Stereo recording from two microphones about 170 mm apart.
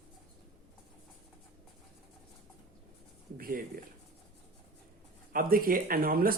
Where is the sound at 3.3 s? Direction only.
55° right (ahead or behind).